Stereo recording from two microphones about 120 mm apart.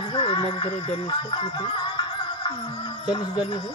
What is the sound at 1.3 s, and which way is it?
Music, 45° left (ahead or behind).